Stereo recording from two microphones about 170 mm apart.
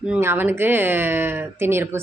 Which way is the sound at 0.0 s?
10° right (ahead or behind).